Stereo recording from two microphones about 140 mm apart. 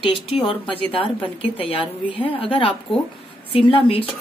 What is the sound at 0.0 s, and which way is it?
A woman's voice, 40° left (ahead or behind).